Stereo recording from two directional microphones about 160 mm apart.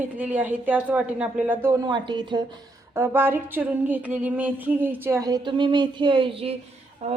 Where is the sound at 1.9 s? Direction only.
30° right (ahead or behind).